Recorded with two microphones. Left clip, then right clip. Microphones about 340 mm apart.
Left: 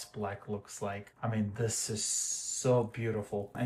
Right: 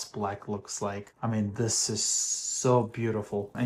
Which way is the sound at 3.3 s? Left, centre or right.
Right.